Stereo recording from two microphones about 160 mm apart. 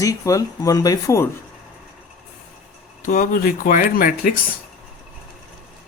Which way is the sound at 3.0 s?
60° left (ahead or behind).